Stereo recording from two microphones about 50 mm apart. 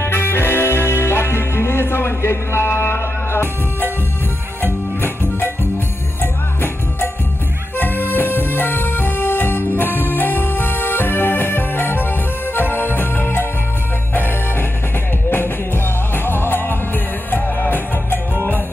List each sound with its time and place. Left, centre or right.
0.0 s music: left
6.2 s music: left